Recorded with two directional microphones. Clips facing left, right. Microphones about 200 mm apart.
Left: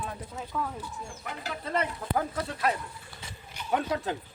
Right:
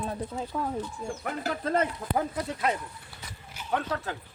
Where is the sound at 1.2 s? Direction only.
50° right (ahead or behind).